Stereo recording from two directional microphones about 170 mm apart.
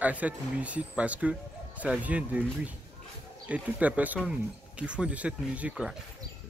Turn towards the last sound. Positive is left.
turn(degrees=-5)  # may be behind; listen again after turning